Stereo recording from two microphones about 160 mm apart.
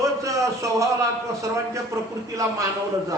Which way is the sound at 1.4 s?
20° right (ahead or behind).